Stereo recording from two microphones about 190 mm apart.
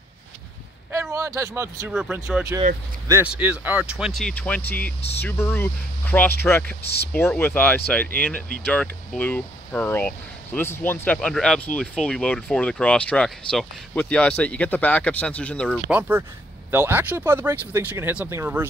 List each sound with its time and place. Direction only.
1.1 s speech: 15° right (ahead or behind); by 6.8 s 10° left (ahead or behind)
6.8 s speech: 60° left (ahead or behind)
7.1 s speech: 10° left (ahead or behind)
15.9 s speech: 10° right (ahead or behind)